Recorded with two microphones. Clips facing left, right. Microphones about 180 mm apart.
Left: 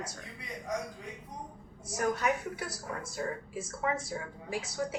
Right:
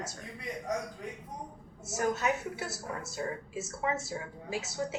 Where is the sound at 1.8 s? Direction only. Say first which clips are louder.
Even; 25° right (ahead or behind).